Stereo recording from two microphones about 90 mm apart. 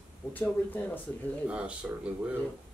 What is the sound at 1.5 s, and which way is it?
Speech, 10° right (ahead or behind).